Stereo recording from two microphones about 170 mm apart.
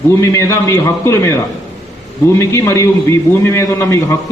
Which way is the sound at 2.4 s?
15° left (ahead or behind).